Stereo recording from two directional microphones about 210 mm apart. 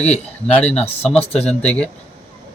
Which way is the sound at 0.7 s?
30° left (ahead or behind).